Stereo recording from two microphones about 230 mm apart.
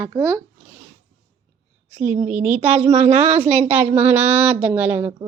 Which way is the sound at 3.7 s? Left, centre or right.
Centre.